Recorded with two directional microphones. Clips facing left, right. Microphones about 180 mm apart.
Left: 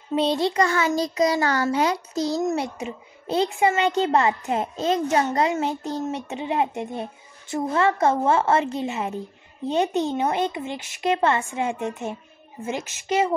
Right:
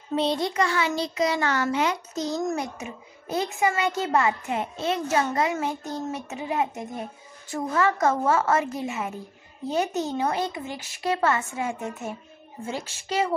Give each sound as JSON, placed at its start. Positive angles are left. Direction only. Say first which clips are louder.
{"t": 0.1, "sound": "a child's voice", "louder": "left 3 dB", "side_deg": 20}
{"t": 0.6, "sound": "a child's voice", "louder": "left 3 dB", "side_deg": 45}